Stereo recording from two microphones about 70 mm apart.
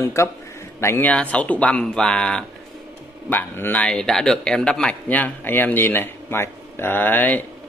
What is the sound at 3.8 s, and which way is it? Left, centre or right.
Speech, centre.